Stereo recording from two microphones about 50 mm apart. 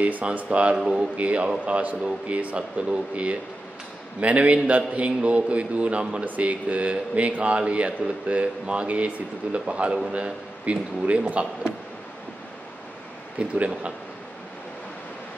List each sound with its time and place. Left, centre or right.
0.0 s speech: right
0.7 s speech: centre
1.1 s speech: right
13.4 s speech: right